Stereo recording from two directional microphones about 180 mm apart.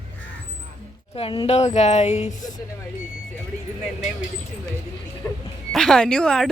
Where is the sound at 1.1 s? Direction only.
30° left (ahead or behind).